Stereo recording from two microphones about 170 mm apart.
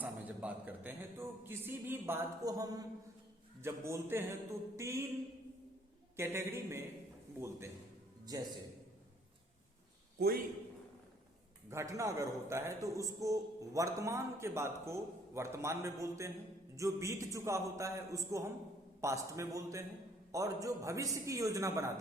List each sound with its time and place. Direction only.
0.0 s a man's voice: 10° right (ahead or behind)
6.1 s a man's voice: 15° right (ahead or behind)
8.2 s a man's voice: 20° right (ahead or behind)
10.2 s a man's voice: 65° right (ahead or behind)
11.7 s a man's voice: 15° right (ahead or behind)